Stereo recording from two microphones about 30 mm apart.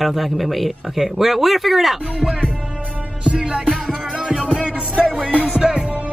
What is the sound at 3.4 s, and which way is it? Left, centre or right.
Music, right.